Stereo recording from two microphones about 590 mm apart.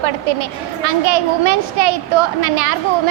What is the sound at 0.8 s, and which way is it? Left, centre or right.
A woman's voice, right.